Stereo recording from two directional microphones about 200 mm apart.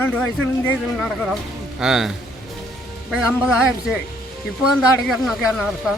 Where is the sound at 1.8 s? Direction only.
5° right (ahead or behind).